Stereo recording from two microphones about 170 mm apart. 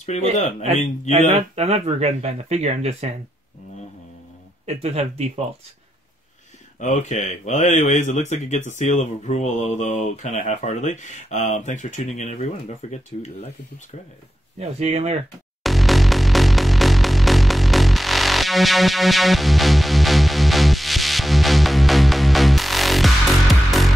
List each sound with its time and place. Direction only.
0.0 s speech: 40° left (ahead or behind)
1.1 s speech: 40° right (ahead or behind)
4.6 s speech: 40° right (ahead or behind)
6.8 s speech: 45° left (ahead or behind)
14.6 s speech: 40° right (ahead or behind)
15.6 s music: centre (ahead or behind)